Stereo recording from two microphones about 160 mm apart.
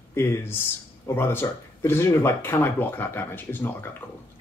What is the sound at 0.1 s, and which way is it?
Speech, 15° left (ahead or behind).